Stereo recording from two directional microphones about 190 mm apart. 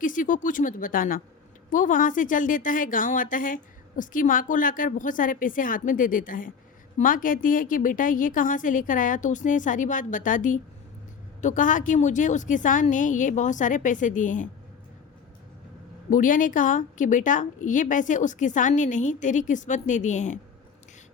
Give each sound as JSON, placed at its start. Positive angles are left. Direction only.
{"t": 0.0, "sound": "a woman's voice", "side_deg": 45}
{"t": 16.0, "sound": "a woman's voice", "side_deg": 45}